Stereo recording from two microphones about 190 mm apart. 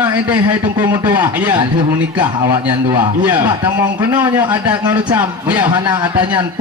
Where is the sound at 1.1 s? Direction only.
10° right (ahead or behind).